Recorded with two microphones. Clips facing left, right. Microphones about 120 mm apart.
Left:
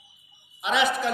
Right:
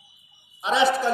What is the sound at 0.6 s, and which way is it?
Speech, 30° right (ahead or behind).